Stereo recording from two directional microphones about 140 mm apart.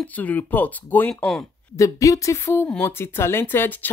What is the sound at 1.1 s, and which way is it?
Speech, centre (ahead or behind).